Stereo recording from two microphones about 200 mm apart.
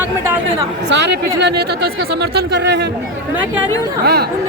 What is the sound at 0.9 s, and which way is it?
Speech, 60° right (ahead or behind).